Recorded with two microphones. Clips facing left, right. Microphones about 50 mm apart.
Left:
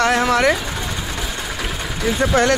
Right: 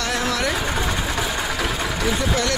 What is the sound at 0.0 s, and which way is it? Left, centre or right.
Vehicle, left.